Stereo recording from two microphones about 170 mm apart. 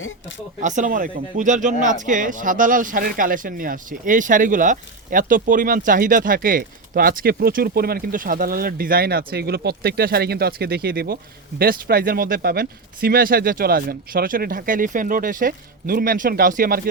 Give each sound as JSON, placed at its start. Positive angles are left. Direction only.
{"t": 0.6, "sound": "speech", "side_deg": -45}